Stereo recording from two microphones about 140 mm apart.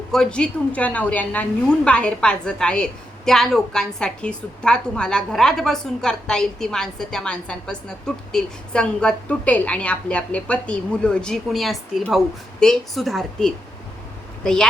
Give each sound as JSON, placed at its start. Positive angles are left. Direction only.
{"t": 0.1, "sound": "a woman's voice", "side_deg": 5}